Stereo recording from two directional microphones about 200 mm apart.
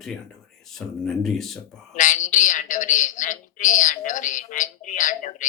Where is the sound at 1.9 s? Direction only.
40° left (ahead or behind).